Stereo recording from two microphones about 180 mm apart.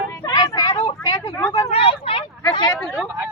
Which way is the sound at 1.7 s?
30° left (ahead or behind).